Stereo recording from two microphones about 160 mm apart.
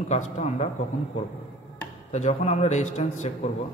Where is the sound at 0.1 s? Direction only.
45° left (ahead or behind).